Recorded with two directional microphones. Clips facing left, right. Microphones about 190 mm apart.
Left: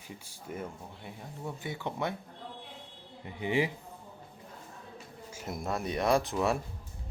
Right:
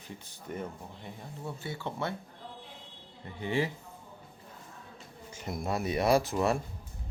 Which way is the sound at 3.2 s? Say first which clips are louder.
Left 1 dB; 15° left (ahead or behind).